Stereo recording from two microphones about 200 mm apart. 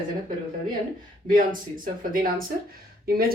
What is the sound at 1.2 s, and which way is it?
Speech, 45° right (ahead or behind).